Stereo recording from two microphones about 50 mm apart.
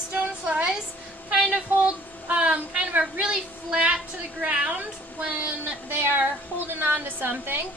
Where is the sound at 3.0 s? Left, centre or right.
Centre.